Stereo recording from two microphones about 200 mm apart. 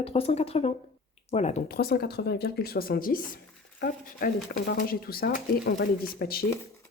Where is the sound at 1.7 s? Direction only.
50° left (ahead or behind).